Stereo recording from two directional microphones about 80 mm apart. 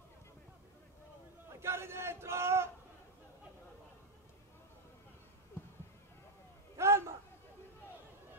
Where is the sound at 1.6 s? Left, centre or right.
Right.